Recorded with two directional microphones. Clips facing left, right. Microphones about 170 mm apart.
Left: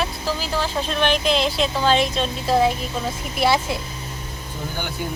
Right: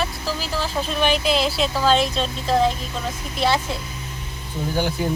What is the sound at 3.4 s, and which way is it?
Speech, 10° left (ahead or behind).